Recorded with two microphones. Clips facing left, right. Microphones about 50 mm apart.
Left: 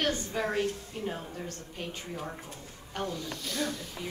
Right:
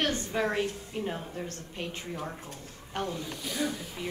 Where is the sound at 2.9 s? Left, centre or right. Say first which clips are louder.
Right 1 dB; right.